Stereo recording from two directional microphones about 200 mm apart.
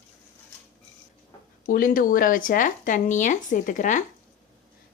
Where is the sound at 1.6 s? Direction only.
45° left (ahead or behind).